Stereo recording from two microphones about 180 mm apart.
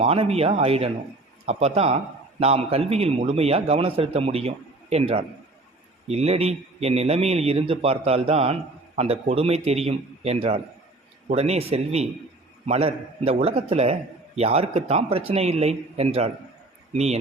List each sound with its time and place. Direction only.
0.0 s a man's voice: 35° right (ahead or behind)